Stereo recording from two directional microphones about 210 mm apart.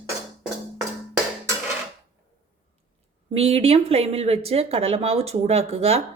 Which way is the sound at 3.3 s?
30° right (ahead or behind).